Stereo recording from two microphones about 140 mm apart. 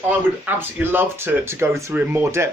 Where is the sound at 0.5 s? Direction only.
15° right (ahead or behind).